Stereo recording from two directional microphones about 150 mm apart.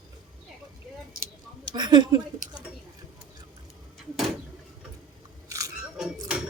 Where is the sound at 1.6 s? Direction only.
30° right (ahead or behind).